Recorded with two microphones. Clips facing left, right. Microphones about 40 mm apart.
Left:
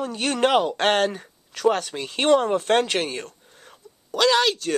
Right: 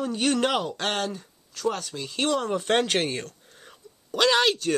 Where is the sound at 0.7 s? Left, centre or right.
Left.